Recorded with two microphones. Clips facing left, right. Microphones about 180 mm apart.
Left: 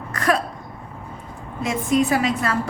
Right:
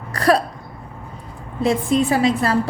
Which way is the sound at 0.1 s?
35° right (ahead or behind).